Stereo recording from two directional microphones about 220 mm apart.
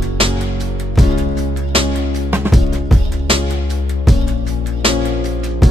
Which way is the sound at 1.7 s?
25° right (ahead or behind).